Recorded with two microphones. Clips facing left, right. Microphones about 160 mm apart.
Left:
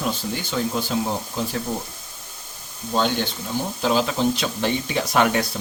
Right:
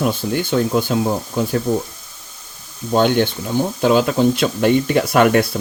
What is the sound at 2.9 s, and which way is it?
Speech, 60° right (ahead or behind).